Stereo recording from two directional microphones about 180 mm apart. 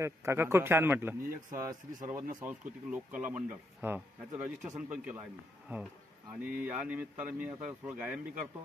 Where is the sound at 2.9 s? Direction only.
5° right (ahead or behind).